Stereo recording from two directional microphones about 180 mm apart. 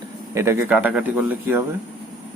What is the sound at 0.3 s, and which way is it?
Speech, 15° right (ahead or behind).